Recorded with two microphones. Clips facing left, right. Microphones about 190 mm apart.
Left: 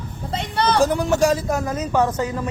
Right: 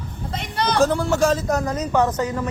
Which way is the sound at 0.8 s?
15° left (ahead or behind).